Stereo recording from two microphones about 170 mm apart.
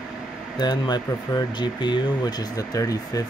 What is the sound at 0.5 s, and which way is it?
Speech, 25° left (ahead or behind).